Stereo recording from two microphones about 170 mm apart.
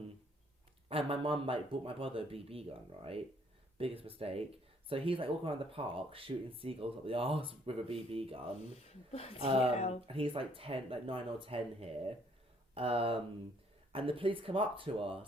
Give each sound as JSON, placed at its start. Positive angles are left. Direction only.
{"t": 0.9, "sound": "speech", "side_deg": -30}
{"t": 8.9, "sound": "speech", "side_deg": 35}
{"t": 10.1, "sound": "speech", "side_deg": -30}